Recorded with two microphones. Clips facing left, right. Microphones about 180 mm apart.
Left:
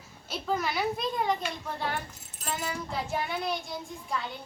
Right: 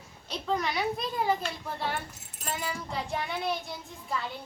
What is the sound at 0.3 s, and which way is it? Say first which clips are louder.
A child's voice: even; 5° left (ahead or behind).